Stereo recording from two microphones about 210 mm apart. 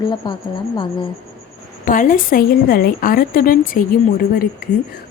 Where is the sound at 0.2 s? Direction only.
20° left (ahead or behind).